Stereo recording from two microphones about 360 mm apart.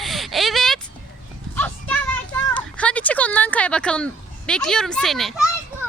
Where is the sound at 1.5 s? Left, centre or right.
Centre.